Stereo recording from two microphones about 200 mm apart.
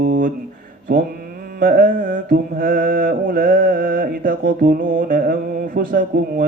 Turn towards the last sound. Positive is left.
turn(degrees=-45)  # may be behind; listen again after turning